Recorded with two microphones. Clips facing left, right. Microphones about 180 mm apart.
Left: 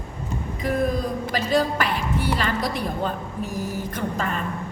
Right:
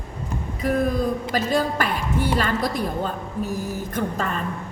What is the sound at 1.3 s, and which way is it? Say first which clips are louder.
A woman's voice: left 3 dB; 45° right (ahead or behind).